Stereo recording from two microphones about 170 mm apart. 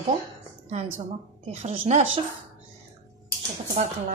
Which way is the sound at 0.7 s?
40° right (ahead or behind).